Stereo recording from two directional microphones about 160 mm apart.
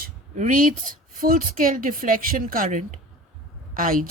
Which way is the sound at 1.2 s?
60° right (ahead or behind).